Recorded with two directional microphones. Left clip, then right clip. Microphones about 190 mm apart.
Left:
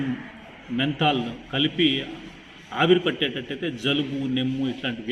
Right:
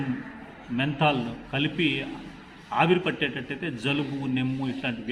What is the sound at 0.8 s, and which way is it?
A man's voice, 20° right (ahead or behind).